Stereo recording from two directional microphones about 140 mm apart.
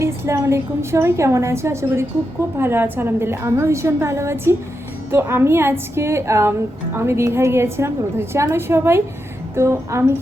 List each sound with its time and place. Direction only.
0.0 s a woman's voice: 20° right (ahead or behind)